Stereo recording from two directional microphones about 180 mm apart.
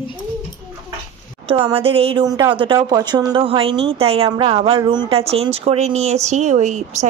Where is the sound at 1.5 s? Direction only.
30° right (ahead or behind).